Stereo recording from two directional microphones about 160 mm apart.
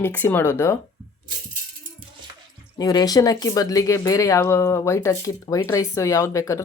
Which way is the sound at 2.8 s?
25° left (ahead or behind).